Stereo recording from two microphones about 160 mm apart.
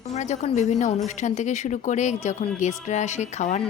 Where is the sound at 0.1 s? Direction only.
45° left (ahead or behind).